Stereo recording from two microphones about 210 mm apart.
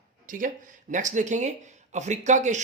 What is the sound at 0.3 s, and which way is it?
Speech, 40° right (ahead or behind).